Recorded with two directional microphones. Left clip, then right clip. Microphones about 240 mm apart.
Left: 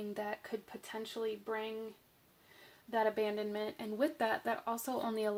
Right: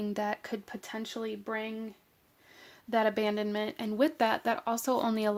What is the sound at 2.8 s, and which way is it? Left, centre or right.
Speech, right.